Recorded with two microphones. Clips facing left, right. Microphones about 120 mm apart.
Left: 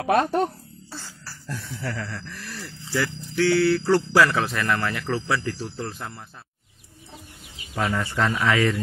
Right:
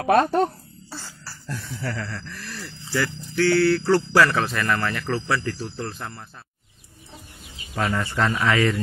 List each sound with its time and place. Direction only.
0.0 s speech: centre (ahead or behind)
1.5 s speech: centre (ahead or behind)
7.7 s speech: 5° left (ahead or behind)